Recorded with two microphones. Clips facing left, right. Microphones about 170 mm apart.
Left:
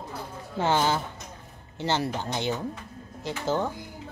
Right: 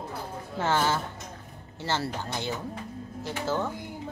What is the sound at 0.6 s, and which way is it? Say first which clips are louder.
A woman's voice: left 2 dB; 15° left (ahead or behind).